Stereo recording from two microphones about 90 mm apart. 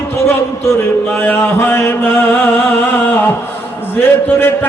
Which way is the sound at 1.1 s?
20° left (ahead or behind).